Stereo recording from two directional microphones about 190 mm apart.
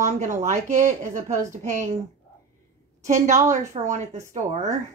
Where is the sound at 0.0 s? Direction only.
40° right (ahead or behind).